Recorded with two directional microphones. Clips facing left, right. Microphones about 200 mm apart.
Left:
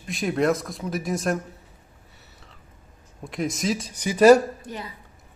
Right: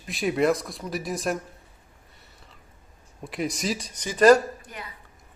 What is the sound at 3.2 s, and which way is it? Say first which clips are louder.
Speech: left 2 dB; centre (ahead or behind).